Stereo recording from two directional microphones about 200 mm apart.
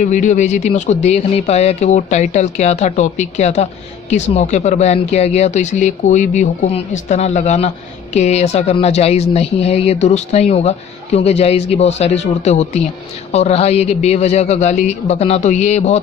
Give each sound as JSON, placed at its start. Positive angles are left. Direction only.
{"t": 0.0, "sound": "speech", "side_deg": 40}